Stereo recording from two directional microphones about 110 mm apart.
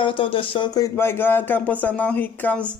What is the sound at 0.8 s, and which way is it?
Speech, 20° left (ahead or behind).